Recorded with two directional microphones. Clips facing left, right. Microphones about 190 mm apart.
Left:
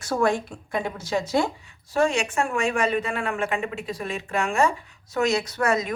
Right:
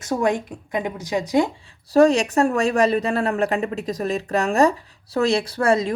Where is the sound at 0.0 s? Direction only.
20° right (ahead or behind).